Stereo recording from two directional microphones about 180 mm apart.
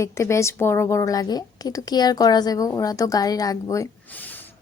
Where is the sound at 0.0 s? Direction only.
15° left (ahead or behind).